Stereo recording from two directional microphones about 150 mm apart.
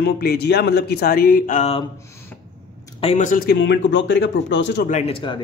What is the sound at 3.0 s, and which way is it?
Speech, 45° left (ahead or behind).